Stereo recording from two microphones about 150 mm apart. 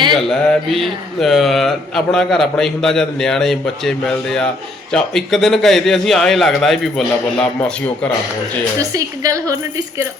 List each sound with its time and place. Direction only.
0.2 s speech: centre (ahead or behind)
8.8 s a woman's voice: 25° right (ahead or behind)